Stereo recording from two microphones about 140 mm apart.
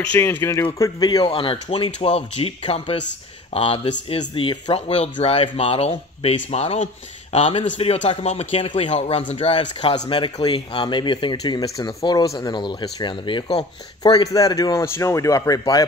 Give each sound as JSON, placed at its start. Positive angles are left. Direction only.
{"t": 0.0, "sound": "a man's voice", "side_deg": 10}
{"t": 0.7, "sound": "speech", "side_deg": 25}